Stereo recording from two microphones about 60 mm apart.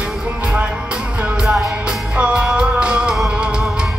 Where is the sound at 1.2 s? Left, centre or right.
Centre.